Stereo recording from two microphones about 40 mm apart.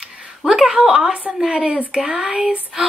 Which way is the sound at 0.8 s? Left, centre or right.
Centre.